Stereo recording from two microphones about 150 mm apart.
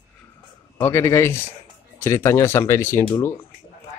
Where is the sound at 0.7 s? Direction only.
15° left (ahead or behind).